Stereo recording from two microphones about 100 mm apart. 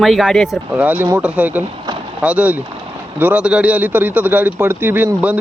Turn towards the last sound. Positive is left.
turn(degrees=-15)  # may be behind; listen again after turning